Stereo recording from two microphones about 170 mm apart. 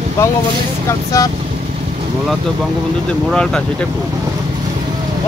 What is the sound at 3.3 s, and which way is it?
Speech, 5° left (ahead or behind).